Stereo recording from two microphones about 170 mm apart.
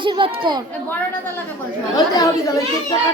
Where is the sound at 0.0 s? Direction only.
30° right (ahead or behind).